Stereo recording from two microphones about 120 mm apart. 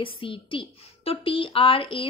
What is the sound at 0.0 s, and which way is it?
A woman's voice, 45° left (ahead or behind).